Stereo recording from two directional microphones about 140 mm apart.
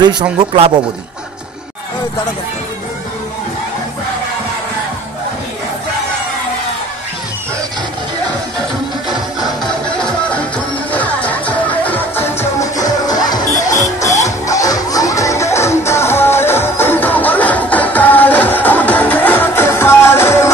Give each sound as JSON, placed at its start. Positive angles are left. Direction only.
{"t": 0.0, "sound": "speech", "side_deg": -30}
{"t": 0.4, "sound": "speech", "side_deg": -45}
{"t": 10.3, "sound": "music", "side_deg": 10}
{"t": 13.5, "sound": "music", "side_deg": 65}
{"t": 13.9, "sound": "music", "side_deg": 20}